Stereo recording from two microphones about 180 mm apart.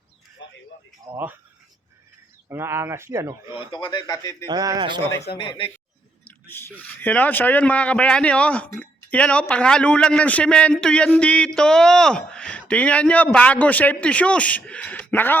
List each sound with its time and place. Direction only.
0.4 s a sound: 85° left
1.1 s speech: 10° right (ahead or behind)
2.5 s speech: 15° right (ahead or behind)
3.7 s a man's voice: 25° left (ahead or behind)
4.4 s speech: 20° right (ahead or behind)
5.4 s a man's voice: 25° left (ahead or behind)
6.2 s speech: 10° left (ahead or behind)